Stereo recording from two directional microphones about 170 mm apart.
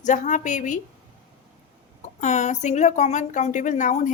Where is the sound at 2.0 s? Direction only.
45° left (ahead or behind).